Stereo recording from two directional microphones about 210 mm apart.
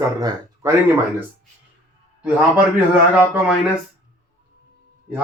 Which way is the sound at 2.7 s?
5° right (ahead or behind).